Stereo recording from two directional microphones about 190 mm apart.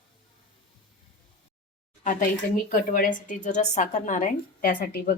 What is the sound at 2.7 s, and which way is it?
A woman's voice, 45° left (ahead or behind).